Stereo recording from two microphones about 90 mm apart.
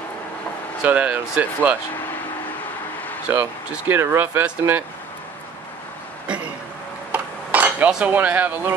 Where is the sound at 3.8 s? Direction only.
25° right (ahead or behind).